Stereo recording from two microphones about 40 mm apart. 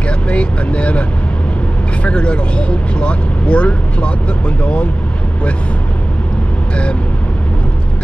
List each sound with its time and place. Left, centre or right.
0.3 s vehicle: left
2.0 s speech: left